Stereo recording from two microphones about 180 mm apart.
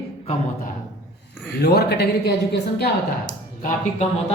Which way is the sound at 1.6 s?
60° left (ahead or behind).